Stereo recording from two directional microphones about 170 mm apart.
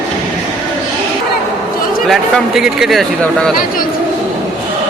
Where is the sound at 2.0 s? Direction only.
Centre (ahead or behind).